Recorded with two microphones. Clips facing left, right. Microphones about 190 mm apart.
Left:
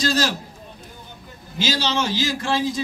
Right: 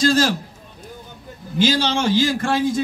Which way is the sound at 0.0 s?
50° right (ahead or behind).